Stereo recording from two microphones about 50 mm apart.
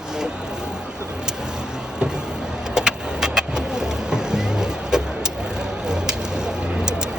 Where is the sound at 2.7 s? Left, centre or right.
Centre.